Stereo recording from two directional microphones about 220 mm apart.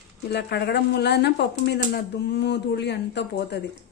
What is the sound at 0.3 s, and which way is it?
Speech, 50° left (ahead or behind).